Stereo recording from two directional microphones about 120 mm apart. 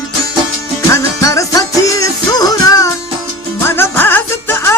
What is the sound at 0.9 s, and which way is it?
Music, 25° left (ahead or behind).